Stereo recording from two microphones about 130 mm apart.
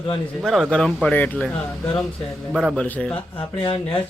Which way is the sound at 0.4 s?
Centre (ahead or behind).